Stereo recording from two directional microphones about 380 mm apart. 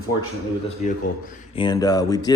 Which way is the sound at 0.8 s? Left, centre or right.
Centre.